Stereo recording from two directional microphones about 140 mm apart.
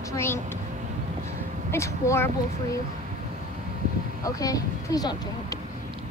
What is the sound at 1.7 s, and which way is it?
Speech, 20° left (ahead or behind).